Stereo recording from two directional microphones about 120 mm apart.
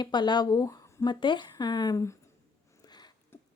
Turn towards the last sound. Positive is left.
turn(degrees=20)  # may be behind; listen again after turning